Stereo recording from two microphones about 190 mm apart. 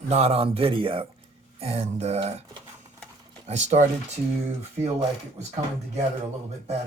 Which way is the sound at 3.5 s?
35° right (ahead or behind).